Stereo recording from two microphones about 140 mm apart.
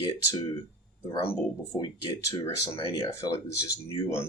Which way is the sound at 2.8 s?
40° left (ahead or behind).